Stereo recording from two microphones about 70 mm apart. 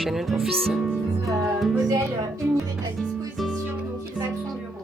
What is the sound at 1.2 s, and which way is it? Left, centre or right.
Music, right.